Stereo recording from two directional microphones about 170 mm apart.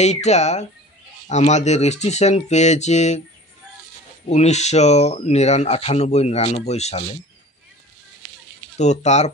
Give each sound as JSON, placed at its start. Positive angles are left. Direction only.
{"t": 0.0, "sound": "speech", "side_deg": 40}
{"t": 4.3, "sound": "speech", "side_deg": 40}
{"t": 8.7, "sound": "speech", "side_deg": 45}